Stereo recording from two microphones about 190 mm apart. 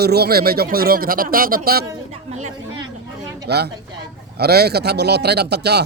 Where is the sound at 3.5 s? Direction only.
60° right (ahead or behind).